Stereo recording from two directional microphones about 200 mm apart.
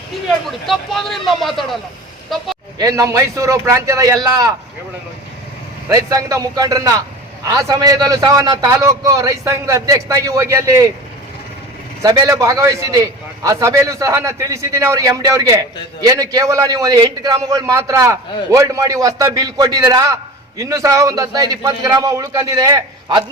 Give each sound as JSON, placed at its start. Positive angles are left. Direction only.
{"t": 0.4, "sound": "speech", "side_deg": 0}
{"t": 2.7, "sound": "a man's voice", "side_deg": -20}
{"t": 5.9, "sound": "a man's voice", "side_deg": -15}
{"t": 12.0, "sound": "a man's voice", "side_deg": -15}